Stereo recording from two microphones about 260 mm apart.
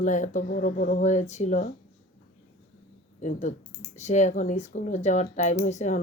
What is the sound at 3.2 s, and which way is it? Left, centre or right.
Speech, left.